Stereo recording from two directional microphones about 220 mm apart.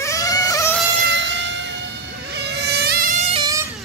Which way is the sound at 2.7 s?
45° right (ahead or behind).